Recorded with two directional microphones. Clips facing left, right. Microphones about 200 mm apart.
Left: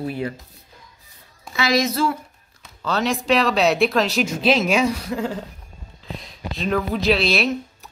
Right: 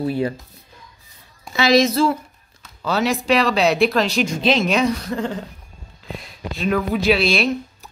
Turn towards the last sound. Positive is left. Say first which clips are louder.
# right 1 dB
turn(degrees=0)  # may be behind; listen again after turning